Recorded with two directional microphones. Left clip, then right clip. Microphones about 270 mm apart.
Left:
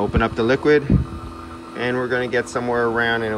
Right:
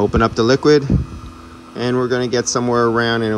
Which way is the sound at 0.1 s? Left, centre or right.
Centre.